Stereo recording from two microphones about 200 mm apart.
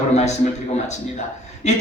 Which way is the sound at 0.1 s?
35° left (ahead or behind).